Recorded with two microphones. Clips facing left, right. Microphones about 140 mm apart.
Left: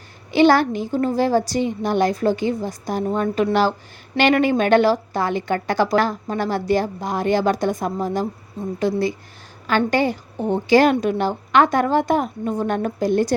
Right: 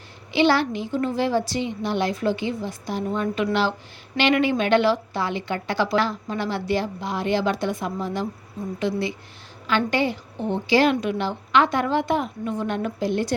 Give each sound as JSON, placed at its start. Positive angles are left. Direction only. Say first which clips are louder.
{"t": 0.3, "sound": "a woman's voice", "louder": "left 5 dB", "side_deg": 45}